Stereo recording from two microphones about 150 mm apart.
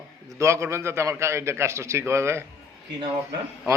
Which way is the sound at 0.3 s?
20° right (ahead or behind).